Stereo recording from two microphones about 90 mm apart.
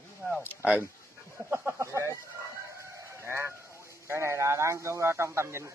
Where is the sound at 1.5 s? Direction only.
30° right (ahead or behind).